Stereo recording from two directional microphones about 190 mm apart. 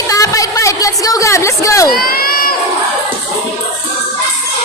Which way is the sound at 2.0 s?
50° left (ahead or behind).